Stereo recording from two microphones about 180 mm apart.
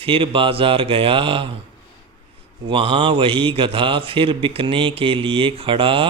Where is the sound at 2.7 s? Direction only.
30° right (ahead or behind).